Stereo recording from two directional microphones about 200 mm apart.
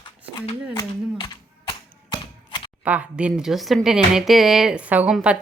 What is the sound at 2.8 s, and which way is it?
Speech, 5° right (ahead or behind).